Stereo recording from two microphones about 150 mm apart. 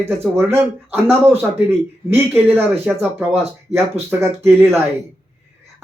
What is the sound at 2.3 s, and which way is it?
Speech, 15° right (ahead or behind).